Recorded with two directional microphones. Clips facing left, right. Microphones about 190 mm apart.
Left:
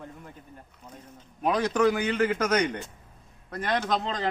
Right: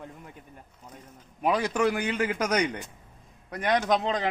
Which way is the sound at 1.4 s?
10° right (ahead or behind).